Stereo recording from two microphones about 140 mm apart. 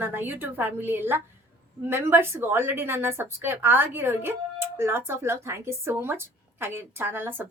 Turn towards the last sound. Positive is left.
turn(degrees=-15)  # may be behind; listen again after turning